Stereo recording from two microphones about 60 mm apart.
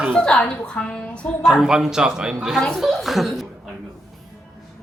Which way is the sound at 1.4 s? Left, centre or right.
Centre.